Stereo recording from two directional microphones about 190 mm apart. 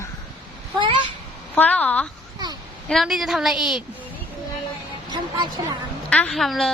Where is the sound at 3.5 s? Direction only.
25° left (ahead or behind).